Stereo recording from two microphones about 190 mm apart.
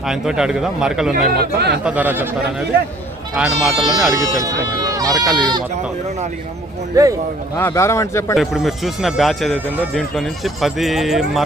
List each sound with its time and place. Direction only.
0.1 s speech: 5° right (ahead or behind)
1.3 s speech: 55° right (ahead or behind)
1.8 s speech: 5° right (ahead or behind)
4.4 s speech: 20° right (ahead or behind)
7.0 s speech: 20° right (ahead or behind)
7.5 s a man's voice: 15° left (ahead or behind)
8.4 s speech: centre (ahead or behind)